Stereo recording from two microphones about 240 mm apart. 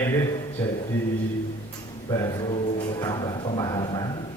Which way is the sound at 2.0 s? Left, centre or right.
Centre.